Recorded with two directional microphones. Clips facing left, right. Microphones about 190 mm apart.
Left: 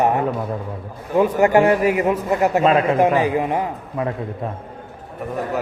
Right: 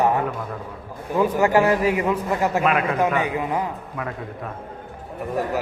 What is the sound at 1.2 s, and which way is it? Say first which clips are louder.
Speech: left 2 dB; 40° left (ahead or behind).